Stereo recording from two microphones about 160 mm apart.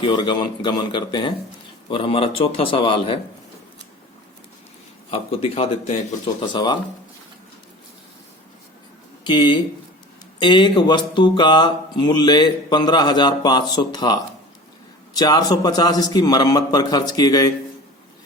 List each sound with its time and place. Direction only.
0.0 s speech: 30° left (ahead or behind)
5.1 s speech: 40° left (ahead or behind)
6.5 s speech: 30° left (ahead or behind)
9.2 s speech: 30° left (ahead or behind)